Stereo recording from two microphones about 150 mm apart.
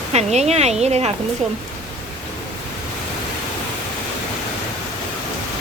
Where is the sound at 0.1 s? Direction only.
45° right (ahead or behind).